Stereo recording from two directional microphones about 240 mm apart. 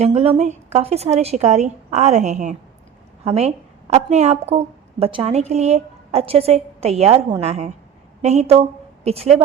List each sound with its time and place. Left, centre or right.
0.0 s a woman's voice: right